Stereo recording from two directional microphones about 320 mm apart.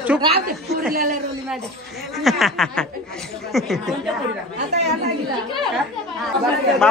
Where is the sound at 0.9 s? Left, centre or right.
Right.